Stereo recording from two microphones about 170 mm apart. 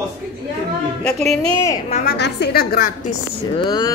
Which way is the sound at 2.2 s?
70° left (ahead or behind).